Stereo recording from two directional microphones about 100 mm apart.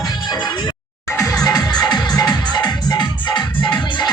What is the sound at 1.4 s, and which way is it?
Music, 40° left (ahead or behind).